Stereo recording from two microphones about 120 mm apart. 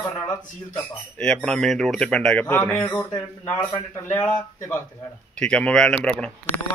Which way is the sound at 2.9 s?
25° left (ahead or behind).